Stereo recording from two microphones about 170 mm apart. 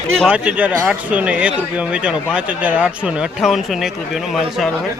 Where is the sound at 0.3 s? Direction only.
5° right (ahead or behind).